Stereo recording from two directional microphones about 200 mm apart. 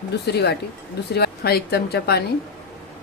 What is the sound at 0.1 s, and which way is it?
Speech, 55° left (ahead or behind).